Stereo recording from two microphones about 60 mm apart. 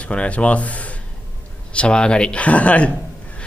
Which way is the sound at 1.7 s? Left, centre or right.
Centre.